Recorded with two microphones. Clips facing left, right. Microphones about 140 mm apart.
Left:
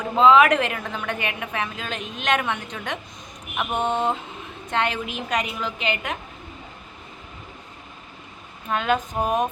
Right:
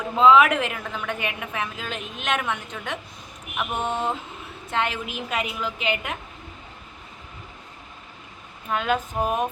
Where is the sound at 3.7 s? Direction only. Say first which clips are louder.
Left 4 dB; 25° left (ahead or behind).